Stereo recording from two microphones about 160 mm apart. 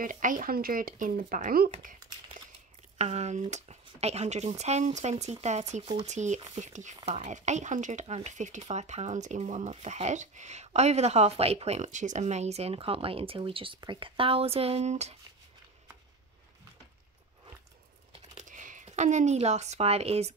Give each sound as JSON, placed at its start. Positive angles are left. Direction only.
{"t": 0.0, "sound": "speech", "side_deg": -55}
{"t": 3.0, "sound": "speech", "side_deg": -45}
{"t": 18.3, "sound": "speech", "side_deg": -50}